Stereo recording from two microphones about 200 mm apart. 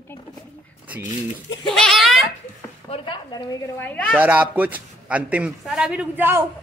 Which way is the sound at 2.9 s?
25° left (ahead or behind).